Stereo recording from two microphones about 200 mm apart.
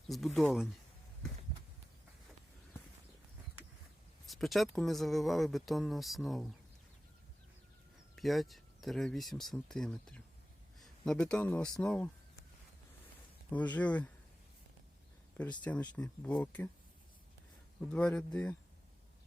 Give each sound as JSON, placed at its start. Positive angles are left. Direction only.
{"t": 0.1, "sound": "speech", "side_deg": 0}
{"t": 1.5, "sound": "a sound", "side_deg": -30}
{"t": 4.3, "sound": "speech", "side_deg": 0}
{"t": 8.1, "sound": "speech", "side_deg": 0}
{"t": 13.5, "sound": "speech", "side_deg": 5}
{"t": 15.4, "sound": "speech", "side_deg": 5}
{"t": 17.9, "sound": "speech", "side_deg": 5}